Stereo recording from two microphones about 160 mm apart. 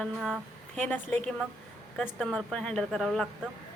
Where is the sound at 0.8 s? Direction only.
10° left (ahead or behind).